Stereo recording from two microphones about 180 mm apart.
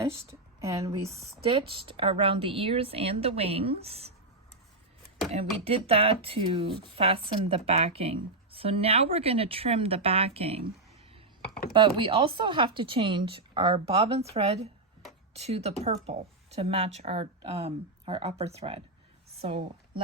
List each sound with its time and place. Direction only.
0.6 s speech: 15° right (ahead or behind)
1.1 s speech: 30° right (ahead or behind)
5.3 s speech: 30° right (ahead or behind)
11.7 s a woman's voice: 25° right (ahead or behind)